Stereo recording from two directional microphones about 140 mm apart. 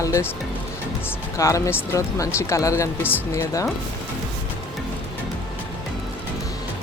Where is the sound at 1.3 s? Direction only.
20° left (ahead or behind).